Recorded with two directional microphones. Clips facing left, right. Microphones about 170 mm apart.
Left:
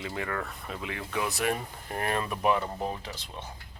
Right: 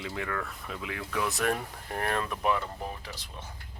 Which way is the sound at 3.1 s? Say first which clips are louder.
Left 2 dB; 25° left (ahead or behind).